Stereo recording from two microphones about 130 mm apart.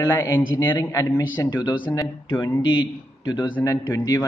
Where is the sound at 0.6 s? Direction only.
35° left (ahead or behind).